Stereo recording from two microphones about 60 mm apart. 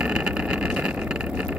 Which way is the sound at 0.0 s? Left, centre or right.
Centre.